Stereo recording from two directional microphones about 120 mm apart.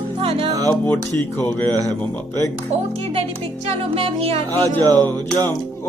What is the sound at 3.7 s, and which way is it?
Music, 55° right (ahead or behind).